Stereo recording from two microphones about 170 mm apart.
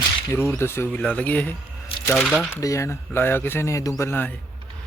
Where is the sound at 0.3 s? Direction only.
15° left (ahead or behind).